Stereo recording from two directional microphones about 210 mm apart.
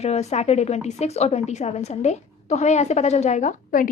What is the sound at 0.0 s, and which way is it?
A woman's voice, 30° left (ahead or behind).